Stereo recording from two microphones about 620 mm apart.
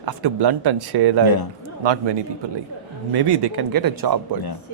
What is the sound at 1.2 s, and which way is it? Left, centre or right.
Speech, left.